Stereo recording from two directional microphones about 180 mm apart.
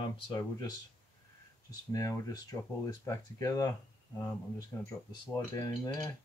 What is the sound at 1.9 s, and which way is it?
Speech, 20° left (ahead or behind).